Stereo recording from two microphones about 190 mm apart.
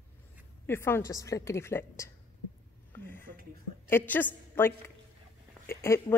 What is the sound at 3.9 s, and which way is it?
A woman's voice, 10° left (ahead or behind).